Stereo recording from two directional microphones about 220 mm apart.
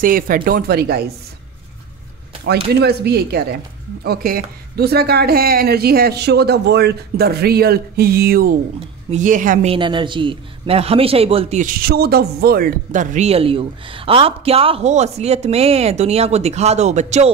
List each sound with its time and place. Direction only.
0.0 s speech: 40° right (ahead or behind)
2.7 s a man's voice: 45° right (ahead or behind); by 17.3 s 30° right (ahead or behind)